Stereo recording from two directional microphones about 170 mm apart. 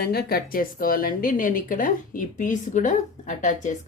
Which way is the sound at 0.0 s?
65° left (ahead or behind).